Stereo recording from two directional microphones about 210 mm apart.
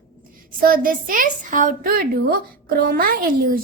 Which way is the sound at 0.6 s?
40° right (ahead or behind).